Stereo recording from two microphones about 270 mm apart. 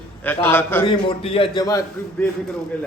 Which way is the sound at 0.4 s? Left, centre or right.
Centre.